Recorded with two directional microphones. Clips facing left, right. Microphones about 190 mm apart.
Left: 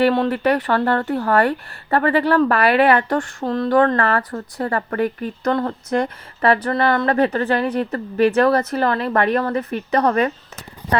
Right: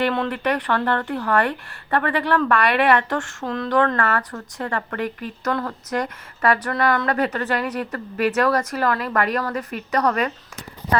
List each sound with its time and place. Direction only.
0.0 s speech: 35° left (ahead or behind)